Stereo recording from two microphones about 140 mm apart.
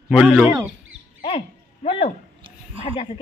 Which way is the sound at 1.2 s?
45° left (ahead or behind).